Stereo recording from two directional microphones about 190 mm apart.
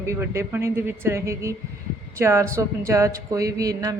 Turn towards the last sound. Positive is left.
turn(degrees=-20)  # may be behind; listen again after turning